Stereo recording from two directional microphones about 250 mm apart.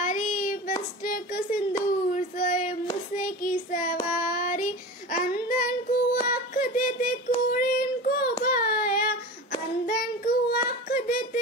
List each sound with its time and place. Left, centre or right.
0.0 s child singing: left
6.2 s a sound: left
7.4 s child singing: left